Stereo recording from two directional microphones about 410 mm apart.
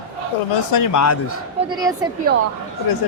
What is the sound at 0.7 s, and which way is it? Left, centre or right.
Speech, left.